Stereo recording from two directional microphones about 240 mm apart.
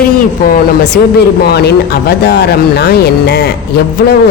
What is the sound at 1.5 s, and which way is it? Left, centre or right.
A man's voice, left.